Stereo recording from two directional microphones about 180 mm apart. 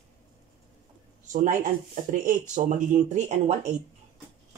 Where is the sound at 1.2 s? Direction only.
45° right (ahead or behind).